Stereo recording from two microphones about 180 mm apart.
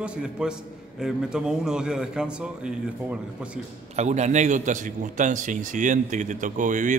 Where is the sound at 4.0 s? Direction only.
40° right (ahead or behind).